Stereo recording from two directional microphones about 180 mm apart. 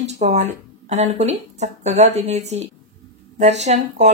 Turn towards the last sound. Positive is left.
turn(degrees=-40)  # may be behind; listen again after turning